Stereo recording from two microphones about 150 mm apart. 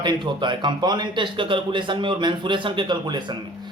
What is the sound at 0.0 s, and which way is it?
Speech, 30° right (ahead or behind).